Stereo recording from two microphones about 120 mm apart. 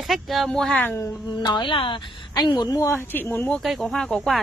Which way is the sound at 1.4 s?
40° left (ahead or behind).